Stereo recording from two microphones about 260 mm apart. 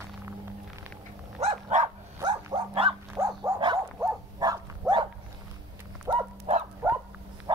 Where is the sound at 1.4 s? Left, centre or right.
Right.